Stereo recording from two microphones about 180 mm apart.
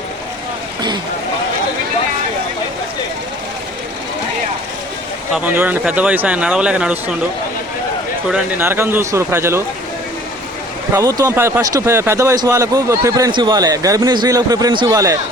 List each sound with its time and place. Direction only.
5.3 s speech: 10° right (ahead or behind)
8.3 s speech: 10° right (ahead or behind)
10.9 s speech: 20° right (ahead or behind)